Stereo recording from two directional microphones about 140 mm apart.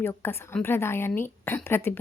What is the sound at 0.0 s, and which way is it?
Speech, 15° left (ahead or behind).